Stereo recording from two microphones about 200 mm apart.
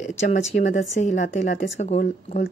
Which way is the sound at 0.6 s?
35° left (ahead or behind).